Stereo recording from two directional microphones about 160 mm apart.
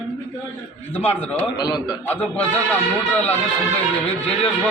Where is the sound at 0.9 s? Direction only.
10° left (ahead or behind).